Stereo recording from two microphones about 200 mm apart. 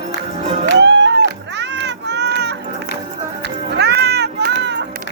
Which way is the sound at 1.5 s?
60° right (ahead or behind).